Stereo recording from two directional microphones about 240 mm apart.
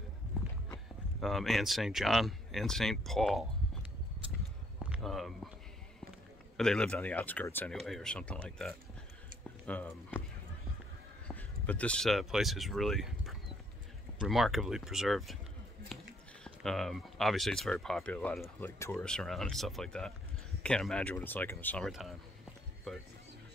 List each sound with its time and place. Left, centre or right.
1.2 s speech: centre
4.7 s a sound: centre
6.5 s speech: centre
11.2 s speech: centre
15.9 s a sound: centre
16.4 s speech: centre
22.9 s music: centre